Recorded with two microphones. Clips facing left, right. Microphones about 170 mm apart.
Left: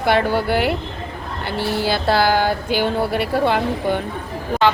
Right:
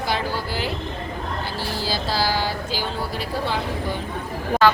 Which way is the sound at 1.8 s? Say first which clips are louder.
Left 7 dB; 60° left (ahead or behind).